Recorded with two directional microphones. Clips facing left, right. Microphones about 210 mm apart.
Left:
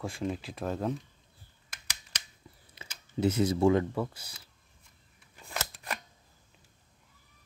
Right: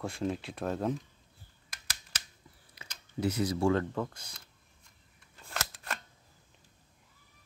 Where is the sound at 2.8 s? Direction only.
25° left (ahead or behind).